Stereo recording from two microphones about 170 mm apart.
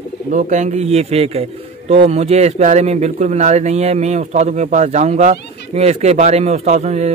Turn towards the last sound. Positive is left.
turn(degrees=-40)  # may be behind; listen again after turning